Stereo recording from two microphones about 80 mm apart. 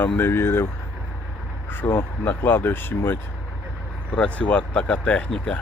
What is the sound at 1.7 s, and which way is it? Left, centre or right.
Speech, left.